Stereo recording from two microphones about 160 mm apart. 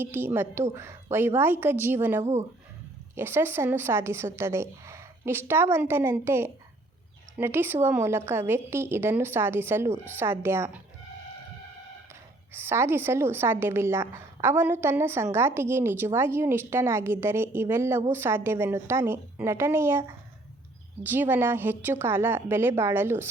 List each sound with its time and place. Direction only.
0.0 s a woman's voice: 10° right (ahead or behind)
12.5 s a woman's voice: 15° right (ahead or behind)